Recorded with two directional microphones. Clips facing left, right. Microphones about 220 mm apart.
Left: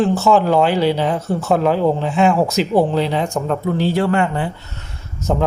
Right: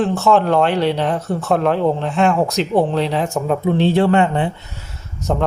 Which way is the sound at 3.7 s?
25° right (ahead or behind).